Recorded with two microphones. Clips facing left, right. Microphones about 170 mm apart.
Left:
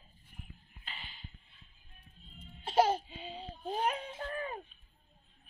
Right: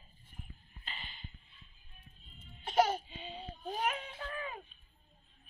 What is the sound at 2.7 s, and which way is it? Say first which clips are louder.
Speech: left 2 dB; 30° left (ahead or behind).